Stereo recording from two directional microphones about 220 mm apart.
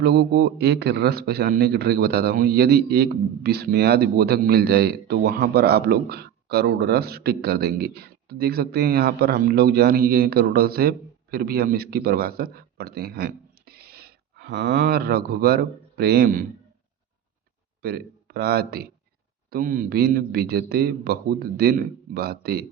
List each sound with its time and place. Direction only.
0.0 s a man's voice: 45° right (ahead or behind)
17.8 s a man's voice: 45° right (ahead or behind)